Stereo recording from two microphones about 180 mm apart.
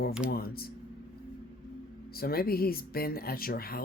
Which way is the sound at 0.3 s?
55° left (ahead or behind).